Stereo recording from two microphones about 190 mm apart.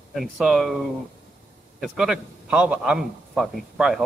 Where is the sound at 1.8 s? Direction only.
5° right (ahead or behind).